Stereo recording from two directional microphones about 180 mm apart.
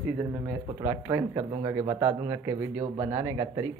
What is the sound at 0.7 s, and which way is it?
Speech, 15° right (ahead or behind).